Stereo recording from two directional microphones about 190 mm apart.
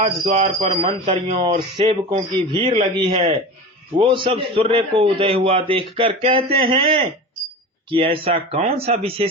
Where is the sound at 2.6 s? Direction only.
35° right (ahead or behind).